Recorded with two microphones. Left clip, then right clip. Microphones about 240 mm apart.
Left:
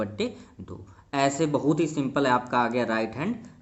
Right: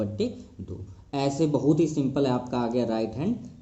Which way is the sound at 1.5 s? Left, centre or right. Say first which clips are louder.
Right 1 dB; left.